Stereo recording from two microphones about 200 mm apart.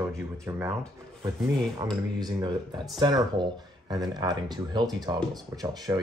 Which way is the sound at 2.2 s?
20° right (ahead or behind).